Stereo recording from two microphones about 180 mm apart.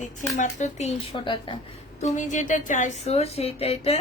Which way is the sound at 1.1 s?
25° left (ahead or behind).